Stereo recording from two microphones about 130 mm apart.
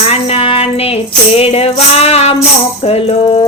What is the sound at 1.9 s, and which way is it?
Music, 50° left (ahead or behind).